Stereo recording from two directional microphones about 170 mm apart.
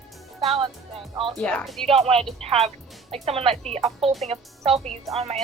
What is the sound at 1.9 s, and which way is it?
Speech, 35° right (ahead or behind).